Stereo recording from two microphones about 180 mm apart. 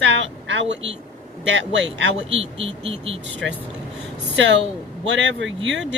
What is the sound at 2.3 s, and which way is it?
Speech, 30° right (ahead or behind).